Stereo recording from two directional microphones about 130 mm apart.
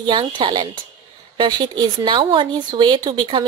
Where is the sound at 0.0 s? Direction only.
35° right (ahead or behind).